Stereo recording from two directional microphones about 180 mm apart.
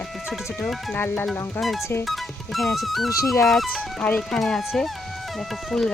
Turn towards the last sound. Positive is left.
turn(degrees=0)  # may be behind; listen again after turning